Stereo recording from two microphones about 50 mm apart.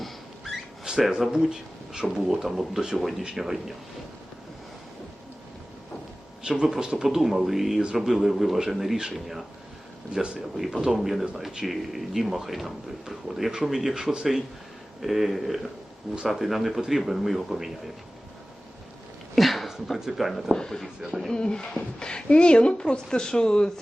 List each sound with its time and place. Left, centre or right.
0.9 s a sound: centre
1.3 s speech: centre
6.4 s speech: centre
10.1 s speech: centre
10.6 s speech: centre
15.0 s speech: centre
19.4 s a sound: centre
19.9 s speech: centre
20.5 s speech: centre
20.8 s speech: centre
21.2 s speech: centre